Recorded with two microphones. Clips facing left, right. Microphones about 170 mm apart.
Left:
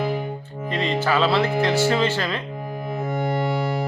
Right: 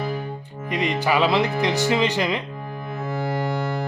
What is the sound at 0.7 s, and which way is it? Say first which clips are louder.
Music: even; 15° right (ahead or behind).